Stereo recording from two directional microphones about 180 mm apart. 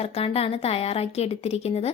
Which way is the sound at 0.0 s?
35° left (ahead or behind).